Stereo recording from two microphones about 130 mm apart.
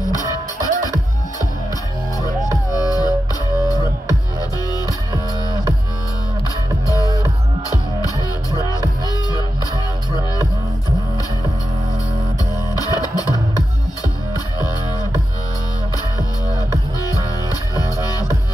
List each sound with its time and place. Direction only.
0.2 s music: 30° left (ahead or behind)
2.5 s music: 30° left (ahead or behind)
12.7 s music: 30° left (ahead or behind)
17.0 s music: 30° left (ahead or behind)